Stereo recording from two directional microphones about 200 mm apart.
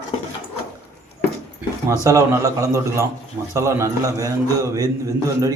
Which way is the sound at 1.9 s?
15° right (ahead or behind).